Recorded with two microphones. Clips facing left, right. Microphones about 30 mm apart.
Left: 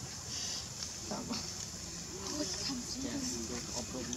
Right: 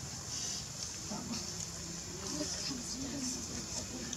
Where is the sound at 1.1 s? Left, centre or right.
Centre.